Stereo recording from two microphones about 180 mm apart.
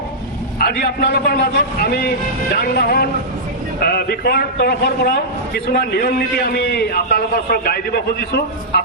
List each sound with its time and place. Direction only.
0.6 s a man's voice: 60° left (ahead or behind)